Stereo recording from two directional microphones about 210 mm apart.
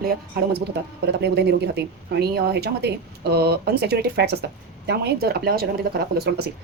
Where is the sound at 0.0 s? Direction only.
45° right (ahead or behind).